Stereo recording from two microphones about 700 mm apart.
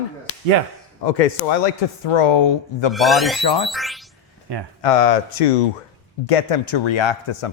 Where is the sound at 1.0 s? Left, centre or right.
Left.